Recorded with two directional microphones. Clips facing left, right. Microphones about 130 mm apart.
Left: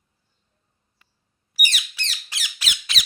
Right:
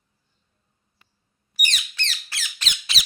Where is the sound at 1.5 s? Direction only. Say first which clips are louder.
Even; 5° left (ahead or behind).